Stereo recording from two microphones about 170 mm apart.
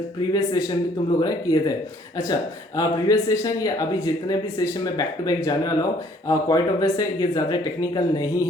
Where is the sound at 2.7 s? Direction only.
20° left (ahead or behind).